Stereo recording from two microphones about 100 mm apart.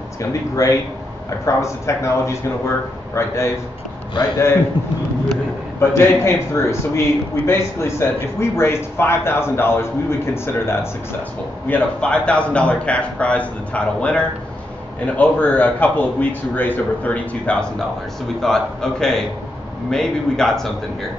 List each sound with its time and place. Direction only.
0.2 s a man's voice: 30° left (ahead or behind)
5.8 s a man's voice: 25° left (ahead or behind)
11.7 s a man's voice: 10° left (ahead or behind)